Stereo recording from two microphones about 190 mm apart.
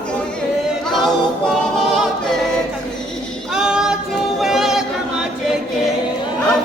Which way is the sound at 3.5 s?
5° right (ahead or behind).